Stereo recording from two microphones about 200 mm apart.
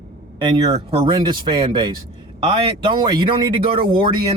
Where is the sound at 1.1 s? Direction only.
20° right (ahead or behind).